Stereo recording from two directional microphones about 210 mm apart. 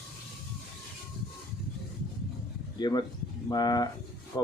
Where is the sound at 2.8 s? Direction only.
20° left (ahead or behind).